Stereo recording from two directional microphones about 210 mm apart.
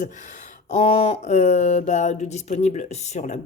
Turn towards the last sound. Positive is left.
turn(degrees=35)  # may be behind; listen again after turning